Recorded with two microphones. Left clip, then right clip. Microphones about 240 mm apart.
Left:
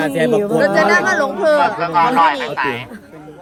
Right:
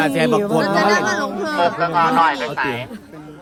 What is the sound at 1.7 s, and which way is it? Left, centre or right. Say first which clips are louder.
Speech: left 2 dB; left.